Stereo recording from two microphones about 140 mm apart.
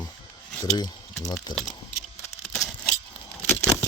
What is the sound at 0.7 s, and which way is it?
Speech, 30° left (ahead or behind).